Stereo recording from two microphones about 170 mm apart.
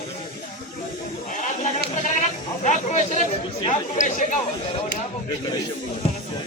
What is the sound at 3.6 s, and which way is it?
Speech, 45° left (ahead or behind).